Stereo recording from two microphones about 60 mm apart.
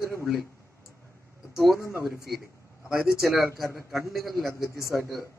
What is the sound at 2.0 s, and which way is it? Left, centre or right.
A man's voice, centre.